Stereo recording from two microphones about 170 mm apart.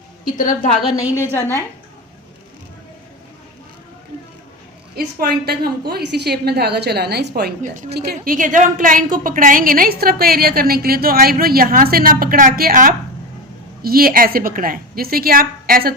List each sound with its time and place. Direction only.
0.3 s a woman's voice: 50° left (ahead or behind)
1.3 s a woman's voice: 15° left (ahead or behind)
4.9 s a woman's voice: 65° right (ahead or behind)